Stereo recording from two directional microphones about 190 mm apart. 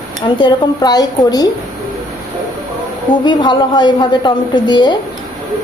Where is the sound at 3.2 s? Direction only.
25° left (ahead or behind).